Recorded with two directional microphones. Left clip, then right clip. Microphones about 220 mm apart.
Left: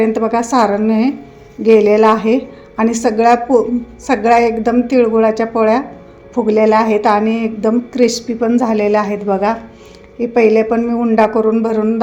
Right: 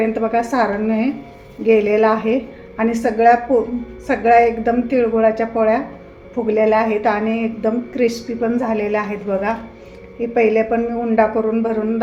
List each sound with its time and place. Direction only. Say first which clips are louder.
0.0 s a woman's voice: left 3 dB; 40° left (ahead or behind)